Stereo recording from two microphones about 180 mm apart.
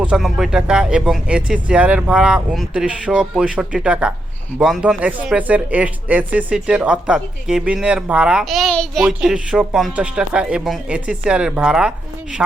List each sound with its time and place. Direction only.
0.0 s speech: 5° right (ahead or behind)